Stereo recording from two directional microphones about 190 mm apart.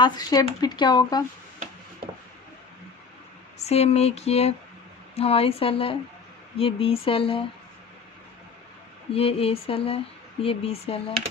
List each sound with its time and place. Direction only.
0.0 s speech: 20° left (ahead or behind)
3.6 s speech: 35° left (ahead or behind)
9.1 s speech: 30° left (ahead or behind)